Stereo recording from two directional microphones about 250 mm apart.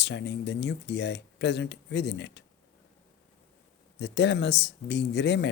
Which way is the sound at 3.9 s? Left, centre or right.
Left.